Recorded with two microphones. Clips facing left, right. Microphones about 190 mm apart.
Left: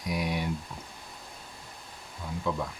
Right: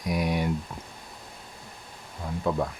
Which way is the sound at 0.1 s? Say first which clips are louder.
Right 4 dB; 50° right (ahead or behind).